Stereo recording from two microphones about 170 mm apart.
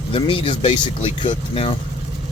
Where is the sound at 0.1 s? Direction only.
30° left (ahead or behind).